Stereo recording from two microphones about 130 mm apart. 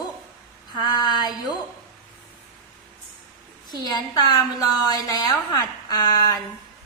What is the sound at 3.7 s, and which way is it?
A woman's voice, 30° left (ahead or behind).